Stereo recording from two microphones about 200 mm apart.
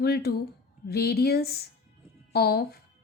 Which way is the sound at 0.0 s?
50° left (ahead or behind).